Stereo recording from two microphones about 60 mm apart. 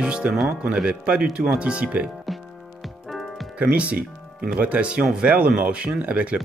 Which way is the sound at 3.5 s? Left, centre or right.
Right.